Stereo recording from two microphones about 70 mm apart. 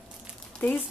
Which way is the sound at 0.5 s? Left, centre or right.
Centre.